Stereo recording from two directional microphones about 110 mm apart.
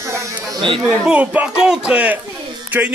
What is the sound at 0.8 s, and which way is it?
Speech, 10° right (ahead or behind).